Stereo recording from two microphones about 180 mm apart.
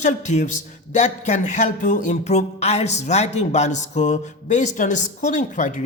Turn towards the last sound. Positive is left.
turn(degrees=45)  # may be behind; listen again after turning